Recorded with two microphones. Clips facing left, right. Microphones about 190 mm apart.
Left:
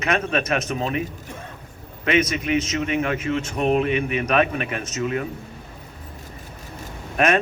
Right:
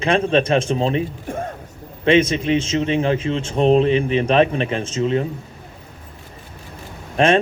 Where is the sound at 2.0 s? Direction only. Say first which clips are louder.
Right 6 dB; 30° right (ahead or behind).